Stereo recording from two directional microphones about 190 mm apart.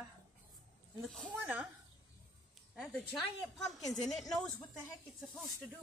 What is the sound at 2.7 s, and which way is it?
A woman's voice, centre (ahead or behind).